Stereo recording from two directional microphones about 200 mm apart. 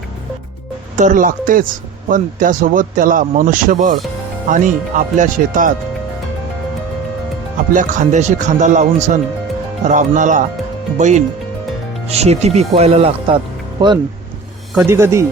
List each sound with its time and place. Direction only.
0.9 s speech: 40° right (ahead or behind)
7.7 s a man's voice: 40° right (ahead or behind); by 15.3 s 15° right (ahead or behind)